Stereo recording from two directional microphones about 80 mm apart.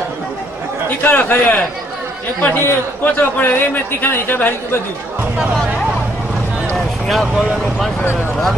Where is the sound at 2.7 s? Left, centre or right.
Left.